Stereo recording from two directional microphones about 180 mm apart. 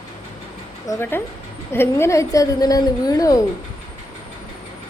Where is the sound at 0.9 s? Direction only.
10° left (ahead or behind).